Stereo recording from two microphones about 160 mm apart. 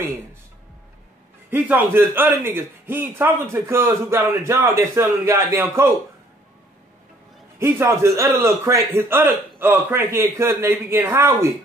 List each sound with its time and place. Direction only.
0.0 s music: 15° right (ahead or behind)
1.5 s a man's voice: 10° right (ahead or behind)
7.5 s a man's voice: 15° right (ahead or behind)